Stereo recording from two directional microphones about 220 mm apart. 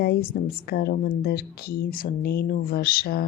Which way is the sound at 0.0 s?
45° left (ahead or behind).